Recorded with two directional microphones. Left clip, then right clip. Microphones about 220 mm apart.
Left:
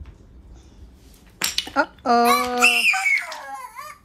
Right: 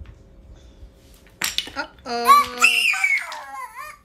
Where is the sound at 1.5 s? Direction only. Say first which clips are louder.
Left 5 dB; 15° left (ahead or behind).